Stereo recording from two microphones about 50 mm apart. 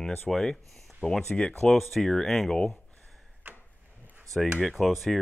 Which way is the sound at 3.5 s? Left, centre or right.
Right.